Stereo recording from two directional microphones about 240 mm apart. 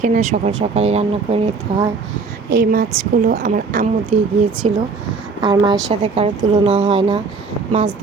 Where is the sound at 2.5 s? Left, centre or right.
Right; by 7.1 s centre.